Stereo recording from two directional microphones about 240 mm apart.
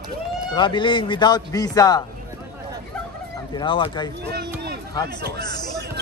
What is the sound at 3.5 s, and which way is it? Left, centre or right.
Speech, left.